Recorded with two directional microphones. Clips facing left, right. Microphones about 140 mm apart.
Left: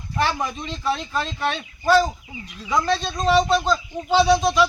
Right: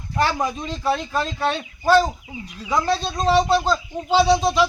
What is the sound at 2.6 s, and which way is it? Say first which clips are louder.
Speech: even; 30° right (ahead or behind).